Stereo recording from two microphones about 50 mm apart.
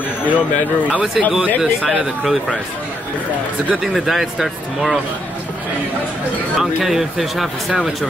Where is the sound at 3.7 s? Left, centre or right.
Centre.